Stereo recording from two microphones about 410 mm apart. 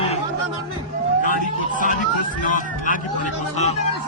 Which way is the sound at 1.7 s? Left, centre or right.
Centre.